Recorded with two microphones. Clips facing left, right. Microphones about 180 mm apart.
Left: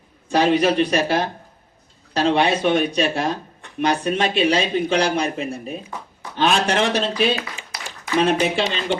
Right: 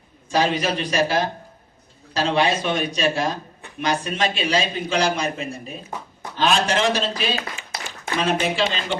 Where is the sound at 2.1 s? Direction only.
60° left (ahead or behind).